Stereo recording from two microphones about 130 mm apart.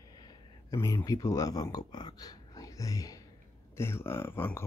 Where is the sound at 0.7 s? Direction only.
25° left (ahead or behind).